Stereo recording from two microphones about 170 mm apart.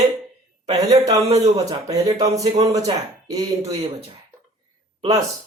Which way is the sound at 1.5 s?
20° right (ahead or behind).